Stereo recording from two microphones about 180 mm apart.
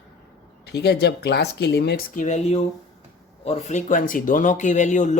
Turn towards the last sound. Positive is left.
turn(degrees=40)  # may be behind; listen again after turning